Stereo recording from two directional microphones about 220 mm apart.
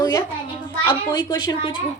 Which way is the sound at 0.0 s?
15° left (ahead or behind).